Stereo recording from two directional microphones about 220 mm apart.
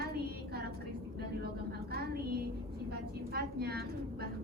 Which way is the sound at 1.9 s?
45° right (ahead or behind).